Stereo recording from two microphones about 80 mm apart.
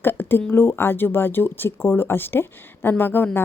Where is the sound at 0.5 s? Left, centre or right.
Left.